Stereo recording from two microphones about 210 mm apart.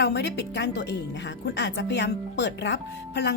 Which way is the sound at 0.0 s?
55° left (ahead or behind).